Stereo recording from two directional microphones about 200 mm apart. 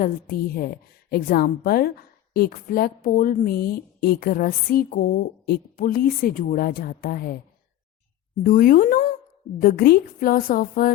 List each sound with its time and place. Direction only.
0.0 s a woman's voice: 45° left (ahead or behind)
8.4 s a woman's voice: 45° left (ahead or behind)